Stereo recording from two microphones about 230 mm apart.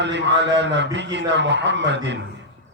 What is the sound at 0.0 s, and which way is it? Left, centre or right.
Speech, right.